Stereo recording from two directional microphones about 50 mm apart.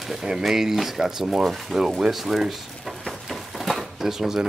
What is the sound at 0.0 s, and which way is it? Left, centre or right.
Speech, centre.